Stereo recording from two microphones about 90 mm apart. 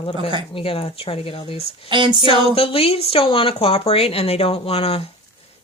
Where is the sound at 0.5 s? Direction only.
90° left.